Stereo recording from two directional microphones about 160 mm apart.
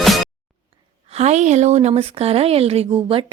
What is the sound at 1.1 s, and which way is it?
Speech, 45° right (ahead or behind).